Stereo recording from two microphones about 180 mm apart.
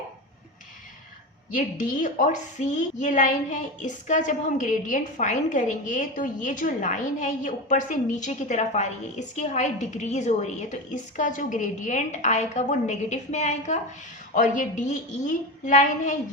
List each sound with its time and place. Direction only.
1.5 s a woman's voice: 45° left (ahead or behind)